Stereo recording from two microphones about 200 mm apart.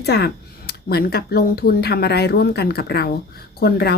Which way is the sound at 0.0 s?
55° left (ahead or behind).